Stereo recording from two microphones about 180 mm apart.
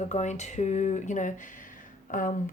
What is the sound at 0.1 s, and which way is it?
Speech, 40° left (ahead or behind).